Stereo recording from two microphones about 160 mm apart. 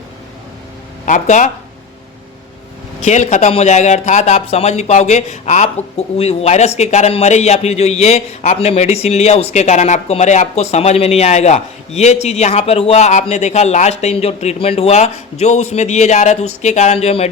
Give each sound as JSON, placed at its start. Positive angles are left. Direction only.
{"t": 1.0, "sound": "speech", "side_deg": 50}
{"t": 3.0, "sound": "speech", "side_deg": 45}